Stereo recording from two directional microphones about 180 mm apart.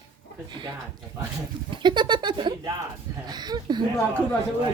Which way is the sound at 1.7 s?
25° right (ahead or behind).